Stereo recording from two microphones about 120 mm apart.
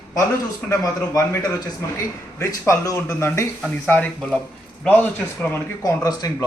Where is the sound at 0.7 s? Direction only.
30° left (ahead or behind); by 5.5 s 15° left (ahead or behind).